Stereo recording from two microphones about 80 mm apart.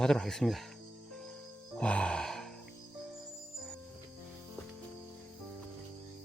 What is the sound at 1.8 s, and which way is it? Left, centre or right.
Music, centre.